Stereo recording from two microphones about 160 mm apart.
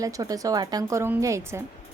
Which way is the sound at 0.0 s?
20° right (ahead or behind).